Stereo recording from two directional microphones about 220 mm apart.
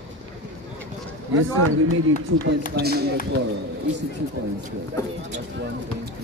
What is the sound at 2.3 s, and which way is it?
Speech, 65° right (ahead or behind).